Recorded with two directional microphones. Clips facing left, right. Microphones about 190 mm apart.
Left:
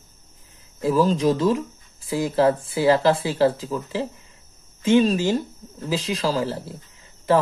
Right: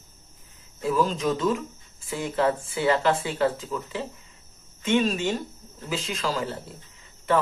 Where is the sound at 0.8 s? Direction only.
35° left (ahead or behind).